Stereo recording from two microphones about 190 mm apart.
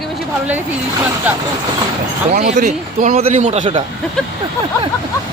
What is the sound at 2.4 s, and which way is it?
Speech, 40° right (ahead or behind).